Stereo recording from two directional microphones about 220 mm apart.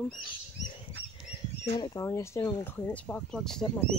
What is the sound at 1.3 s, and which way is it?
Speech, 20° left (ahead or behind).